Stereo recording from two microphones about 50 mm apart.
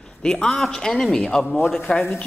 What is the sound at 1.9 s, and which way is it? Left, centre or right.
Speech, left.